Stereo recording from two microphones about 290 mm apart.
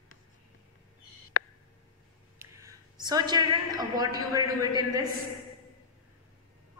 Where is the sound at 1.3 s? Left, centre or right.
Left.